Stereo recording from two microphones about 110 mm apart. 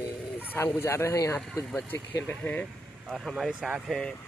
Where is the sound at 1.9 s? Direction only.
15° left (ahead or behind).